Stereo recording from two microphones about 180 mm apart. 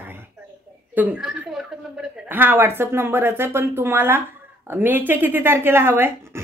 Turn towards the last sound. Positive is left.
turn(degrees=-15)  # may be behind; listen again after turning